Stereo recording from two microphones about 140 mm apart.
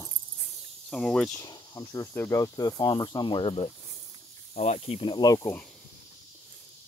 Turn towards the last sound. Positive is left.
turn(degrees=25)  # may be behind; listen again after turning